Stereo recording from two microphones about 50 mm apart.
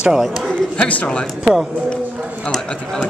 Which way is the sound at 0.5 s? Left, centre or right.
Left.